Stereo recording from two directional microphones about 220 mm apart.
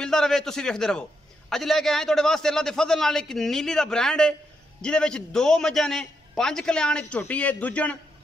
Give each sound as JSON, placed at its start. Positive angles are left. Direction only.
{"t": 0.0, "sound": "a man's voice", "side_deg": 0}